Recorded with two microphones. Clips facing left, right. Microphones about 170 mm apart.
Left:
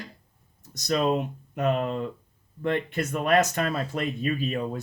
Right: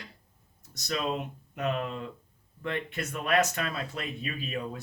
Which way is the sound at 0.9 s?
40° left (ahead or behind).